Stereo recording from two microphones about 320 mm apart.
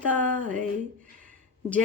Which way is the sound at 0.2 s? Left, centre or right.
Right.